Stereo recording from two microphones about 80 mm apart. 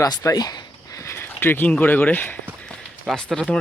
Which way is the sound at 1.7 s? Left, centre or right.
Left.